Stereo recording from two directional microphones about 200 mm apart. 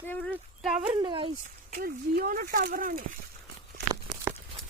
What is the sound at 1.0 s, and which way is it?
Speech, 25° right (ahead or behind).